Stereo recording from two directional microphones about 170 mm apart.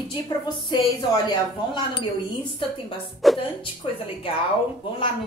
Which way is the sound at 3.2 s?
Centre (ahead or behind).